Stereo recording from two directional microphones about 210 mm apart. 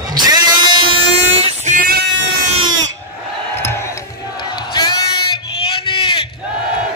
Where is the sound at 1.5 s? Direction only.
35° right (ahead or behind).